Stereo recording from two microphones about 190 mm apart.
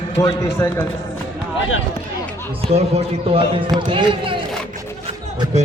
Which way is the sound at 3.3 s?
25° right (ahead or behind).